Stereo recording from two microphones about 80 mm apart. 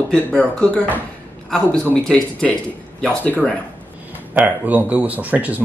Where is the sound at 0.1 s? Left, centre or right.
Centre.